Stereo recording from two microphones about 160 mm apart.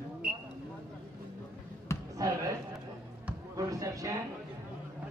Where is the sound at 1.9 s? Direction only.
20° left (ahead or behind).